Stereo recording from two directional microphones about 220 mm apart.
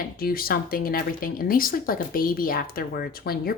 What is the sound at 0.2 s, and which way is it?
Speech, 40° left (ahead or behind).